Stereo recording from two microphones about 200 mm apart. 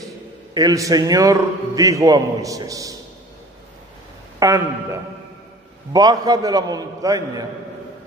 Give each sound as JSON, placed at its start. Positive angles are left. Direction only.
{"t": 0.6, "sound": "a man's voice", "side_deg": -15}
{"t": 4.4, "sound": "a man's voice", "side_deg": -15}